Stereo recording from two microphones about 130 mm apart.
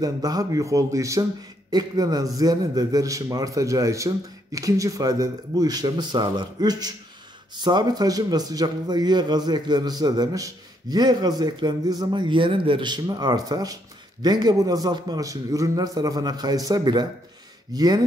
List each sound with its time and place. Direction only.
0.0 s a man's voice: 30° right (ahead or behind)